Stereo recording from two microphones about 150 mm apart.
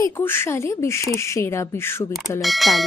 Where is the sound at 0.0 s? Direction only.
15° left (ahead or behind).